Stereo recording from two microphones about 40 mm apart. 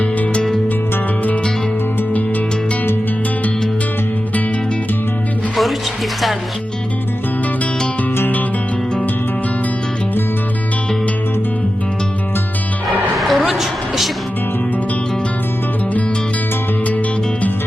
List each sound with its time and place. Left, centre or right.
0.0 s music: left
13.1 s music: centre
13.5 s a sound: centre